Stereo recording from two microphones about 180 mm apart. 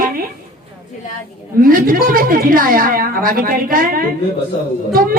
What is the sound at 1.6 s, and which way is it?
A woman's voice, 50° right (ahead or behind).